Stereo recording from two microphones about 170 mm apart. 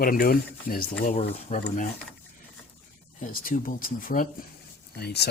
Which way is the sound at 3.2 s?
55° left (ahead or behind).